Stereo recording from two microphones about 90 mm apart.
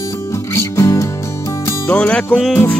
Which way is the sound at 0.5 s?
35° left (ahead or behind).